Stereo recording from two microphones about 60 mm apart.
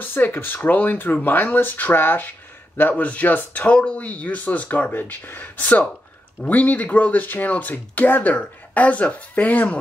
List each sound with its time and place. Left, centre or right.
0.0 s speech: left